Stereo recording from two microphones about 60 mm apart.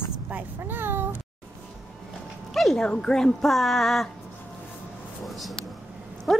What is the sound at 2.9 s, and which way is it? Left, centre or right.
Speech, centre.